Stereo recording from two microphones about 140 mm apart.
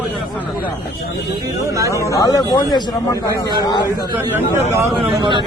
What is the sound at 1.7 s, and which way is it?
Speech, 20° right (ahead or behind).